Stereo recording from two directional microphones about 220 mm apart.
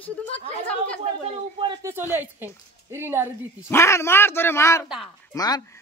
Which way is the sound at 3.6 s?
10° left (ahead or behind).